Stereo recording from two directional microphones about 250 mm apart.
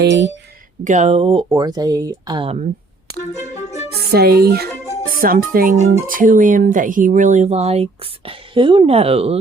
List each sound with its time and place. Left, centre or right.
0.0 s speech: right
0.9 s speech: right
3.3 s music: left
4.1 s speech: right